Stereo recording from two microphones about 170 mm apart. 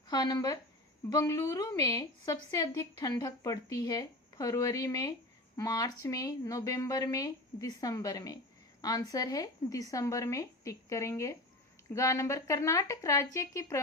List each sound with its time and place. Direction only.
0.1 s speech: 25° left (ahead or behind)